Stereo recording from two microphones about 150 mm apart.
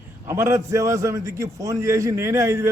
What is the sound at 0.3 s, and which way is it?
A man's voice, 15° right (ahead or behind).